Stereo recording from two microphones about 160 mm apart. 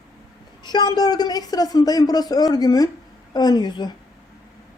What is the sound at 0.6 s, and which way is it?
A woman's voice, 25° left (ahead or behind).